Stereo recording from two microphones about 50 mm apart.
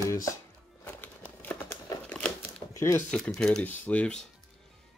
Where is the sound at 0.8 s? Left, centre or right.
Left.